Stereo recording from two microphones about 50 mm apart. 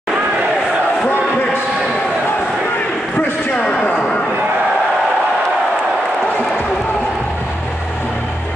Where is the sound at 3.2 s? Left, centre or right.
Left.